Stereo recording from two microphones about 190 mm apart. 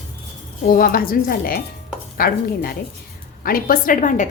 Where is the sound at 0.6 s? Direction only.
50° left (ahead or behind).